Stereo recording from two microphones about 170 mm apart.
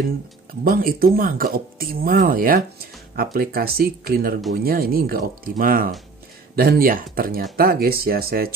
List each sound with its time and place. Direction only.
0.7 s speech: 60° right (ahead or behind)